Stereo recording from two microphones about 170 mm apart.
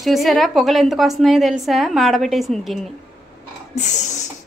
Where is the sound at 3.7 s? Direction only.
45° left (ahead or behind).